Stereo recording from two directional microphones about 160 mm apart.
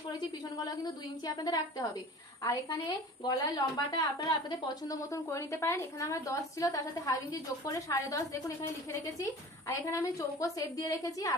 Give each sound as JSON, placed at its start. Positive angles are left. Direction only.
{"t": 0.6, "sound": "a woman's voice", "side_deg": 20}